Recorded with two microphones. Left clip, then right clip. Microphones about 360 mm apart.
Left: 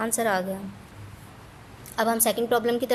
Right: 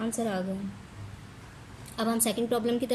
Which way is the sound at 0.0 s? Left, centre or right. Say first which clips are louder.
Left 7 dB; centre.